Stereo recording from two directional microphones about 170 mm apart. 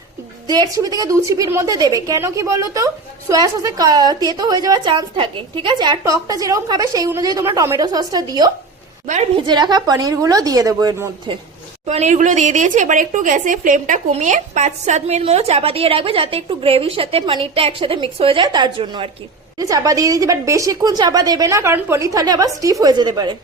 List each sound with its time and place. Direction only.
0.4 s a woman's voice: 25° right (ahead or behind)
9.0 s a woman's voice: 40° right (ahead or behind)
9.5 s a woman's voice: 25° right (ahead or behind)
11.9 s a woman's voice: 40° right (ahead or behind)
19.5 s a woman's voice: 20° right (ahead or behind)